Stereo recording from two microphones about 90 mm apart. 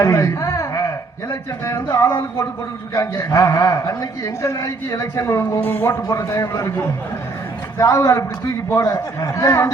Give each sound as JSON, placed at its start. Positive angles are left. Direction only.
{"t": 0.0, "sound": "a man's voice", "side_deg": 35}
{"t": 6.1, "sound": "a man's voice", "side_deg": 40}